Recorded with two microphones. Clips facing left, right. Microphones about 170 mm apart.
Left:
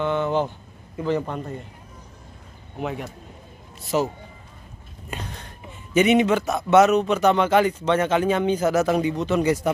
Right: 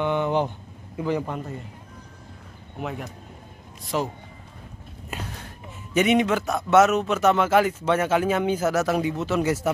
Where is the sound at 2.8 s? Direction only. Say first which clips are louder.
Left 3 dB; centre (ahead or behind).